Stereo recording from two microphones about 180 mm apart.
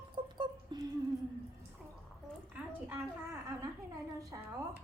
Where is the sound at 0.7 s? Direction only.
25° right (ahead or behind).